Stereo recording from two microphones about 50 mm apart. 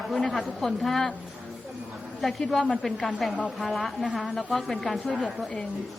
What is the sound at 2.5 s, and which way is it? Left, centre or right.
A woman's voice, centre.